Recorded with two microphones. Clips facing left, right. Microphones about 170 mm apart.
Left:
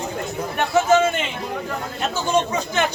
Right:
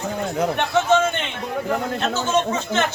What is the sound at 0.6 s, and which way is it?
A man's voice, 10° left (ahead or behind).